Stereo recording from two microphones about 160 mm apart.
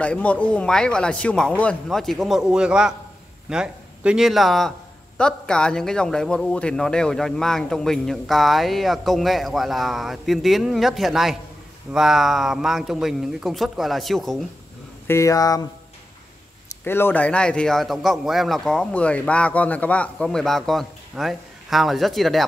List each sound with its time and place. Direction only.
0.0 s a man's voice: 10° left (ahead or behind)
15.0 s speech: 20° left (ahead or behind)
16.8 s a man's voice: 15° left (ahead or behind)